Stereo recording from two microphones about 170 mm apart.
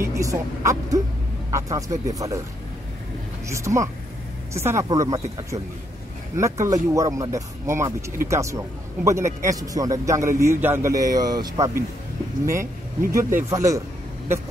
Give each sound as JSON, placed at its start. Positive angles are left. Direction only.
{"t": 0.0, "sound": "a man's voice", "side_deg": -20}
{"t": 3.4, "sound": "a man's voice", "side_deg": -15}
{"t": 13.1, "sound": "speech", "side_deg": -15}